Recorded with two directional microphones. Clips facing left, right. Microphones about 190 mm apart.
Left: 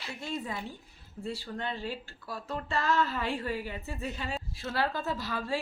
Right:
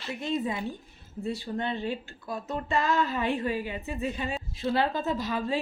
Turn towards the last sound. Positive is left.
turn(degrees=-20)  # may be behind; listen again after turning